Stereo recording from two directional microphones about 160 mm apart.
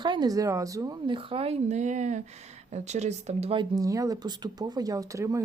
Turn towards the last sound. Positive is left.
turn(degrees=-20)  # may be behind; listen again after turning